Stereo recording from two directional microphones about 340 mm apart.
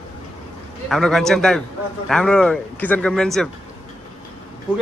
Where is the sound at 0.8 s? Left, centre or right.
Centre.